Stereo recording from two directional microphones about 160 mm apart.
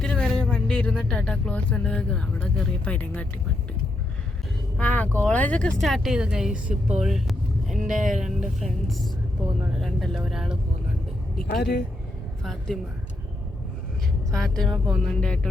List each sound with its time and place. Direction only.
0.0 s speech: 5° left (ahead or behind)
4.8 s speech: 10° left (ahead or behind)
7.0 s vehicle: centre (ahead or behind)
8.0 s speech: centre (ahead or behind)
11.4 s speech: 90° left
12.4 s a woman's voice: centre (ahead or behind)
14.3 s speech: 5° left (ahead or behind)